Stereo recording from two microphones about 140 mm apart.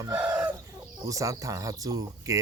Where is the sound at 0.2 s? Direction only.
10° right (ahead or behind).